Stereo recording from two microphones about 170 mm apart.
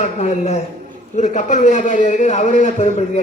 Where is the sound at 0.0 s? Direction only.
40° left (ahead or behind).